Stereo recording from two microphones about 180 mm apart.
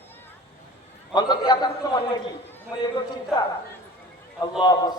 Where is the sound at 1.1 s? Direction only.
25° left (ahead or behind).